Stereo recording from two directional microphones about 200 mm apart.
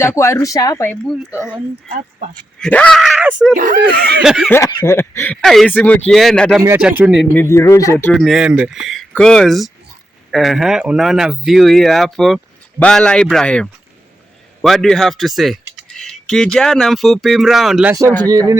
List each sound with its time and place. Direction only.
0.0 s speech: 15° left (ahead or behind)
1.0 s speech: centre (ahead or behind)
1.9 s speech: 40° right (ahead or behind)
2.6 s speech: 5° left (ahead or behind)
3.6 s speech: 50° right (ahead or behind)
4.2 s speech: centre (ahead or behind)
4.4 s speech: 15° left (ahead or behind)
6.6 s speech: 10° right (ahead or behind)
7.3 s speech: 15° left (ahead or behind); by 17.9 s 5° right (ahead or behind)